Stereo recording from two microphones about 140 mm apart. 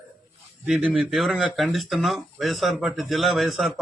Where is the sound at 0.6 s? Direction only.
10° right (ahead or behind).